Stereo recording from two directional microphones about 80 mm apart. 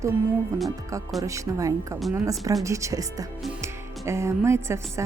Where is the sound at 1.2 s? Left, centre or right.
Right.